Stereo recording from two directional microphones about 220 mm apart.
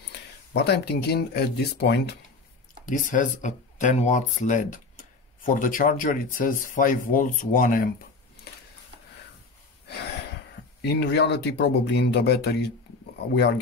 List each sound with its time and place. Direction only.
0.1 s speech: 50° left (ahead or behind)
2.8 s speech: 35° left (ahead or behind)
10.8 s speech: 50° left (ahead or behind)